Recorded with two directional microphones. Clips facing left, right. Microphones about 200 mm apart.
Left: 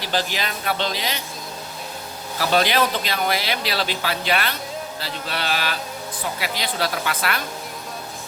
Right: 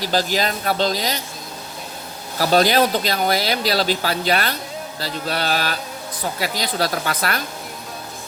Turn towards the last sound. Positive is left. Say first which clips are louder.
# right 2 dB
turn(degrees=-40)  # may be behind; listen again after turning